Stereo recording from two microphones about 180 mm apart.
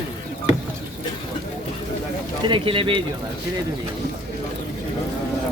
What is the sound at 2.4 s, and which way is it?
Speech, 25° right (ahead or behind).